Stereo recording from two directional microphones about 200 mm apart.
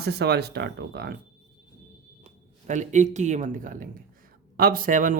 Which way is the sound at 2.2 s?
35° right (ahead or behind).